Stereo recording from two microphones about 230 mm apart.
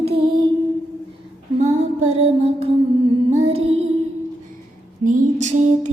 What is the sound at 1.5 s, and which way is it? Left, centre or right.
Music, right.